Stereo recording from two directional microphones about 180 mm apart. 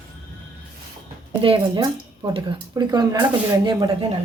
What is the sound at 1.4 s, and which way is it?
Speech, 25° right (ahead or behind).